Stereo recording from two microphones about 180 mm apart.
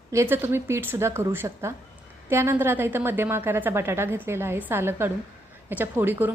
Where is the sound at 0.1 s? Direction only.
15° right (ahead or behind).